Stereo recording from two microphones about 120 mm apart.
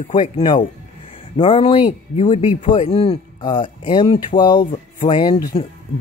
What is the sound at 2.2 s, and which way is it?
Speech, 75° left (ahead or behind).